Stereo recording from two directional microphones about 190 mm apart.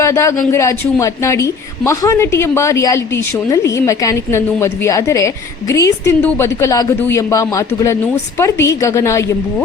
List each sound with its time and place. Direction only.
0.0 s a woman's voice: 15° left (ahead or behind)